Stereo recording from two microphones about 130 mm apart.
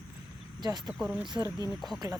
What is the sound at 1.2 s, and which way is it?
Speech, 35° right (ahead or behind).